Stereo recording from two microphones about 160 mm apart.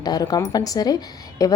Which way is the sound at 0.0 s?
25° left (ahead or behind).